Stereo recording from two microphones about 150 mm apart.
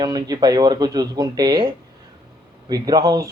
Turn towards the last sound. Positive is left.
turn(degrees=-25)  # may be behind; listen again after turning